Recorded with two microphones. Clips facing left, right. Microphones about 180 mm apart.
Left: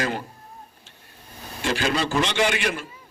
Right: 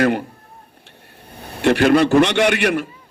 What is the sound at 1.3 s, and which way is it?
A man's voice, 60° right (ahead or behind).